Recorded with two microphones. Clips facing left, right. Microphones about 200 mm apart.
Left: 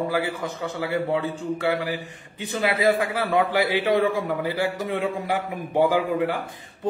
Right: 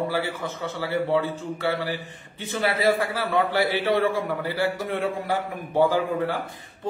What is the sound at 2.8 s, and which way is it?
A man's voice, 15° left (ahead or behind).